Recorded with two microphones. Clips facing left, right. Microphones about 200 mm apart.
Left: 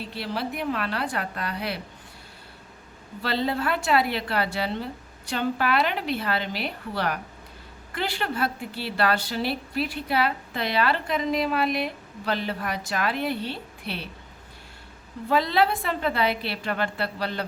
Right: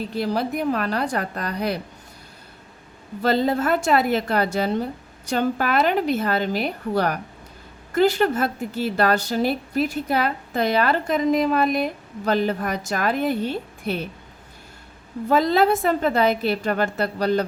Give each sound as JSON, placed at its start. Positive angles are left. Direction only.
{"t": 0.0, "sound": "a woman's voice", "side_deg": -45}
{"t": 3.2, "sound": "a woman's voice", "side_deg": -45}
{"t": 15.3, "sound": "a woman's voice", "side_deg": -45}